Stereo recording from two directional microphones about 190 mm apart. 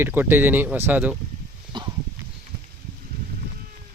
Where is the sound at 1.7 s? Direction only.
25° right (ahead or behind).